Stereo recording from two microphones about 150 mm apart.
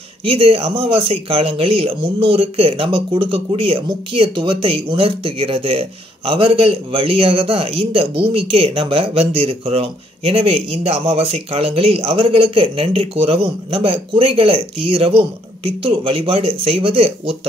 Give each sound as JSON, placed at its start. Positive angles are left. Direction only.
{"t": 0.2, "sound": "speech", "side_deg": -40}